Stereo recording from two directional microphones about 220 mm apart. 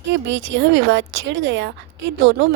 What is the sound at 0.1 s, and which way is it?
A woman's voice, 55° right (ahead or behind).